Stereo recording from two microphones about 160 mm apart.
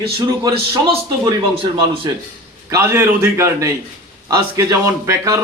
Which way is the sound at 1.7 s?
30° right (ahead or behind).